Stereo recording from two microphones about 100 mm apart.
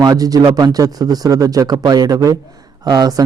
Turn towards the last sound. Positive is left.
turn(degrees=-45)  # may be behind; listen again after turning